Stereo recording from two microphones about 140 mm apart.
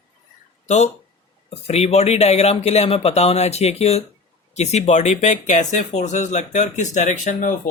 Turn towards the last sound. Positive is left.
turn(degrees=65)  # may be behind; listen again after turning